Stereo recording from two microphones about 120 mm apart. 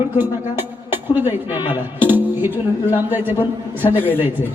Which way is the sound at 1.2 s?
15° right (ahead or behind).